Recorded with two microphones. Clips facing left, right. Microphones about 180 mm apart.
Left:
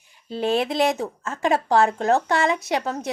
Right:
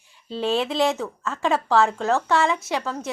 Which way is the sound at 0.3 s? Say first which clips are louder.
Left 1 dB; 15° left (ahead or behind).